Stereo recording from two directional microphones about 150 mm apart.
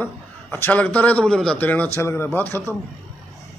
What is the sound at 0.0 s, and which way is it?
A man's voice, 15° left (ahead or behind).